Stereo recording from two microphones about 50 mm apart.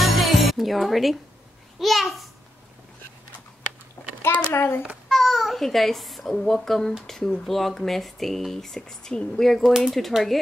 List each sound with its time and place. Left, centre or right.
0.0 s music: centre
1.8 s a child's voice: centre
4.0 s a sound: left
4.5 s a child's voice: left
5.0 s a child's voice: centre
9.6 s speech: centre
9.9 s a child's voice: centre